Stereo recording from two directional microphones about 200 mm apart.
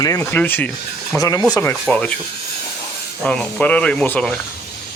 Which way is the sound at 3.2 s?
5° left (ahead or behind).